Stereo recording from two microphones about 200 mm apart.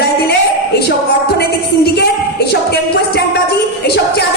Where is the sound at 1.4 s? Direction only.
55° left (ahead or behind).